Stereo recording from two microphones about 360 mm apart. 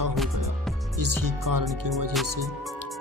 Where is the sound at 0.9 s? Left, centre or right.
Right.